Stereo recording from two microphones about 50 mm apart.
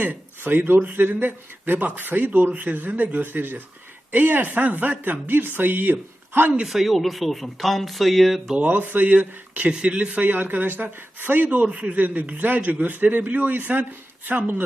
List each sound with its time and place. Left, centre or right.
0.0 s speech: right
6.7 s speech: centre
8.5 s speech: right
9.6 s speech: right
11.5 s speech: right